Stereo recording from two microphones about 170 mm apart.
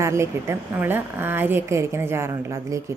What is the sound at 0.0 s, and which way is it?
A woman's voice, 15° right (ahead or behind).